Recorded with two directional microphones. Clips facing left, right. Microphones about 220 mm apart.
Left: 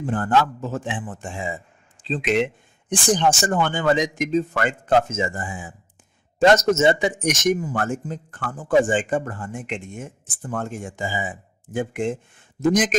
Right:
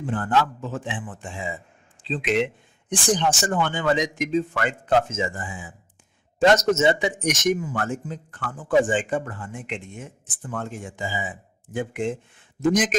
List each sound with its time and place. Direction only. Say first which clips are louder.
0.0 s speech: left 2 dB; 45° left (ahead or behind)